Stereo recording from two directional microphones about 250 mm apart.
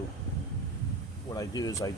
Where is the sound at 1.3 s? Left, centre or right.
Centre.